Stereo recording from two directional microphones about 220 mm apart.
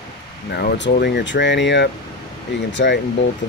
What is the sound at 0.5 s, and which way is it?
Speech, 55° left (ahead or behind).